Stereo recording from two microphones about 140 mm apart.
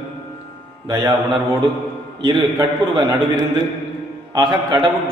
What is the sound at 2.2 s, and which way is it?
Speech, 35° right (ahead or behind).